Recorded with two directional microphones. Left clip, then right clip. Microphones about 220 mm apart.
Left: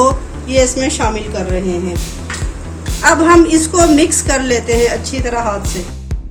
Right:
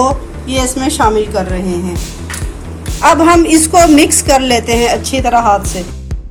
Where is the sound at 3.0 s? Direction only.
30° right (ahead or behind).